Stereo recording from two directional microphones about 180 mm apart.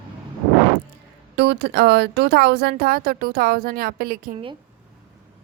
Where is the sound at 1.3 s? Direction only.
70° right (ahead or behind).